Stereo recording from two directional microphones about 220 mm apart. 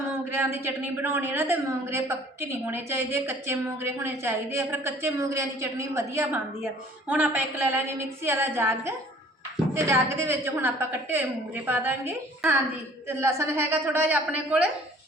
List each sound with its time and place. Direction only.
0.1 s a woman's voice: 10° right (ahead or behind)